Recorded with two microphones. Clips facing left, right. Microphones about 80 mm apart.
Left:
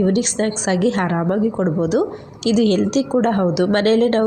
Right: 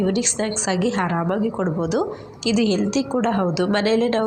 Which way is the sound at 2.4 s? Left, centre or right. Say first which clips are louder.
Left 4 dB; left.